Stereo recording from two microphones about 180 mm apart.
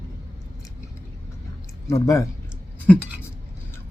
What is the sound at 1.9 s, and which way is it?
Speech, 20° left (ahead or behind).